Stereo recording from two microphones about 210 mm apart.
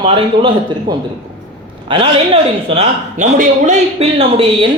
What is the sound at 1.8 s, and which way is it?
A woman's voice, 25° right (ahead or behind).